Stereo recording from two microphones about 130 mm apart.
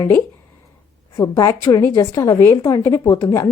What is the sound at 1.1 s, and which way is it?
A woman's voice, 30° left (ahead or behind).